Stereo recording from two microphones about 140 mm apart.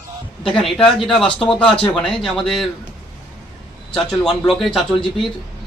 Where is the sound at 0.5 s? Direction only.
Centre (ahead or behind).